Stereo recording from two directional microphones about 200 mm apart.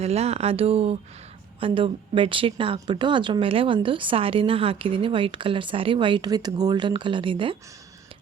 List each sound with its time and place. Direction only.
0.0 s speech: 30° right (ahead or behind)